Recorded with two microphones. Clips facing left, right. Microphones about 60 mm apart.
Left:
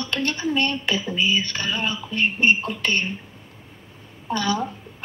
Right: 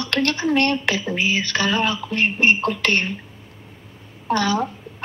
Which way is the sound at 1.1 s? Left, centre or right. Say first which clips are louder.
Right 1 dB; right.